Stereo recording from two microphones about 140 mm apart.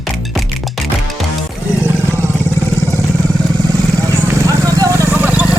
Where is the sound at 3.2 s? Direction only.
25° right (ahead or behind).